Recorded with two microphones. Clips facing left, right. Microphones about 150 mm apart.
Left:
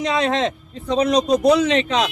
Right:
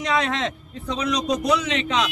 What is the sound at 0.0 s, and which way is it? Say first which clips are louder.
A man's voice: left 4 dB; 30° left (ahead or behind).